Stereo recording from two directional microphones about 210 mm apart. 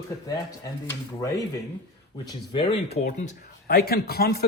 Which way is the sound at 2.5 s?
30° left (ahead or behind).